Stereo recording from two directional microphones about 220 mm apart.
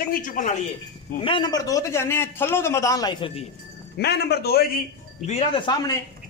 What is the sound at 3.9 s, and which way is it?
Speech, 45° left (ahead or behind).